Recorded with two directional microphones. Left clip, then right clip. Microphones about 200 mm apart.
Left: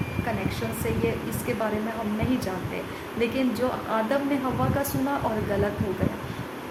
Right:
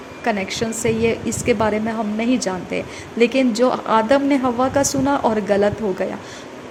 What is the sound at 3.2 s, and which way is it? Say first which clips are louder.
A woman's voice: right 10 dB; 40° right (ahead or behind).